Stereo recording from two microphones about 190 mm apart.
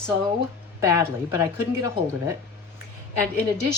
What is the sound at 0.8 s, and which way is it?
A woman's voice, 15° right (ahead or behind).